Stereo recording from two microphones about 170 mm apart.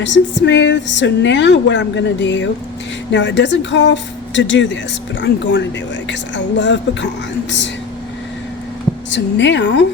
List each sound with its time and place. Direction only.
0.0 s a woman's voice: 90° left
9.0 s a woman's voice: 90° left